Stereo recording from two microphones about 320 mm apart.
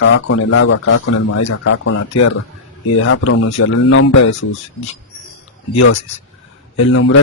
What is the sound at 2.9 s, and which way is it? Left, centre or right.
Speech, left.